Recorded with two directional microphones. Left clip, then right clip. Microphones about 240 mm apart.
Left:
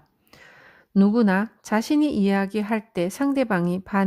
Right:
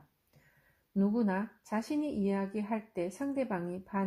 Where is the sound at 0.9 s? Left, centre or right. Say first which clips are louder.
Left 12 dB; left.